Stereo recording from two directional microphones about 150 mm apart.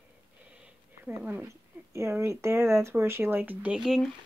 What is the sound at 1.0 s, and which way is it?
Speech, 10° right (ahead or behind).